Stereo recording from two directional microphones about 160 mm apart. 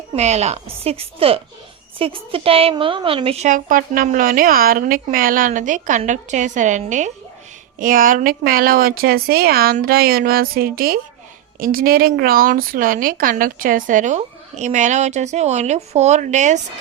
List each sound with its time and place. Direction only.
0.1 s a woman's voice: 45° right (ahead or behind)
7.8 s a woman's voice: 60° right (ahead or behind)